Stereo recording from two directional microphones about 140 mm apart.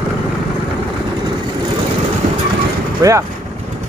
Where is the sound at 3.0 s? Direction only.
25° right (ahead or behind).